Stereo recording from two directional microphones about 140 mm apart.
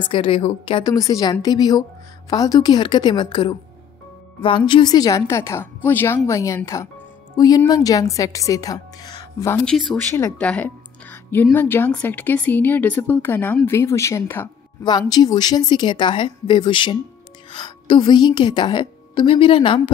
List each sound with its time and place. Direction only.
0.0 s a woman's voice: 40° left (ahead or behind)
0.8 s a woman's voice: 25° left (ahead or behind)
9.7 s speech: centre (ahead or behind)
9.9 s a woman's voice: 15° left (ahead or behind)
14.8 s a woman's voice: 30° left (ahead or behind)